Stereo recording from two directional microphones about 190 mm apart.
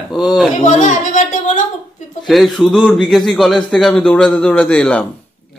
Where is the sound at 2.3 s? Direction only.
Centre (ahead or behind).